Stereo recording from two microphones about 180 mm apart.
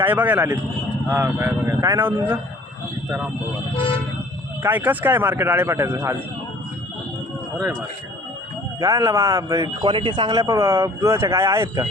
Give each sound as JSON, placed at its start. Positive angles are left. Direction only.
{"t": 0.0, "sound": "speech", "side_deg": -10}
{"t": 4.6, "sound": "speech", "side_deg": -10}
{"t": 8.8, "sound": "speech", "side_deg": -15}